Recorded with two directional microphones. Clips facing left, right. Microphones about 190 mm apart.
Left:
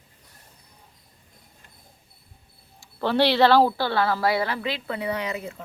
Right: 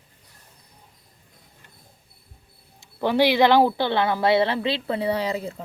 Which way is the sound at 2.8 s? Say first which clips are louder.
Right 2 dB; 15° right (ahead or behind).